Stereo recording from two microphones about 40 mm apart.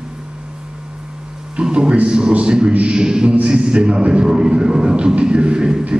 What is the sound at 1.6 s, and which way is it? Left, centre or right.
Speech, right.